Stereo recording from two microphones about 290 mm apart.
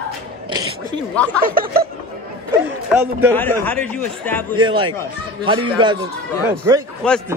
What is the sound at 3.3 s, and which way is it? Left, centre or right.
A man's voice, centre.